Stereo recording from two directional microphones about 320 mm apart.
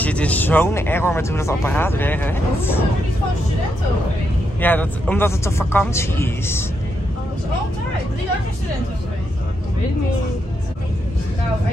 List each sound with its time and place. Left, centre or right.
0.0 s speech: centre
4.6 s speech: centre